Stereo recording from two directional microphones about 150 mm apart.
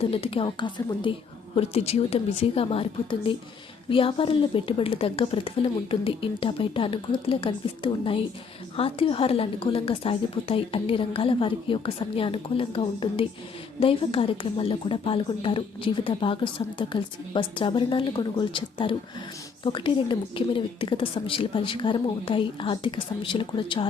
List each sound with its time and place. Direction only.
0.0 s a woman's voice: 40° left (ahead or behind)
1.5 s a woman's voice: 45° left (ahead or behind)